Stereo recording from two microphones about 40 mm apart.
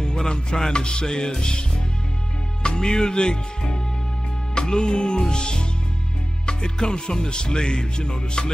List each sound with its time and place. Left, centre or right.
0.0 s music: centre
2.6 s music: centre